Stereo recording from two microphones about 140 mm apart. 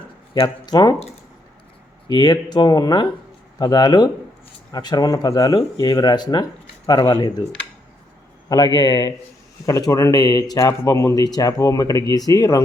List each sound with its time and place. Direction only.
0.4 s speech: 30° left (ahead or behind)
2.0 s speech: 30° left (ahead or behind)
8.4 s speech: 30° left (ahead or behind)